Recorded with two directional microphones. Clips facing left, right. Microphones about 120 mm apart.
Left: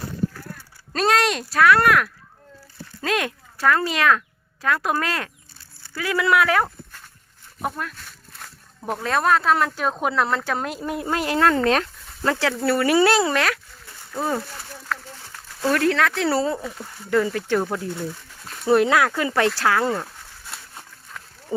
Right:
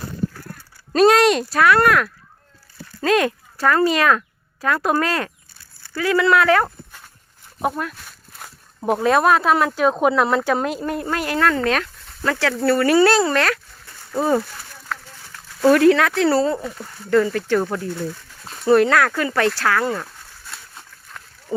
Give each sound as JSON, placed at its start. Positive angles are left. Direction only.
{"t": 0.9, "sound": "speech", "side_deg": -5}
{"t": 8.9, "sound": "speech", "side_deg": -15}
{"t": 10.9, "sound": "speech", "side_deg": 20}
{"t": 14.1, "sound": "speech", "side_deg": -10}
{"t": 15.6, "sound": "speech", "side_deg": -10}
{"t": 17.1, "sound": "speech", "side_deg": 15}